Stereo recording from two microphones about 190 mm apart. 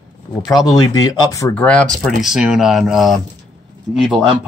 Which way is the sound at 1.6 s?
5° left (ahead or behind).